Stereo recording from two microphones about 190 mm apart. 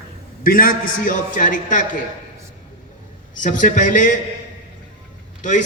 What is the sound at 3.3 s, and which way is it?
Speech, 40° left (ahead or behind).